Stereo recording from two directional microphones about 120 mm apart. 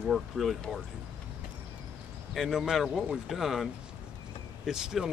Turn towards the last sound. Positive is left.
turn(degrees=-5)  # may be behind; listen again after turning